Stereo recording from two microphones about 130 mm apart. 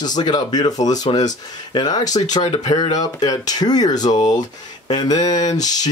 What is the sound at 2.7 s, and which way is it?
Speech, 30° left (ahead or behind).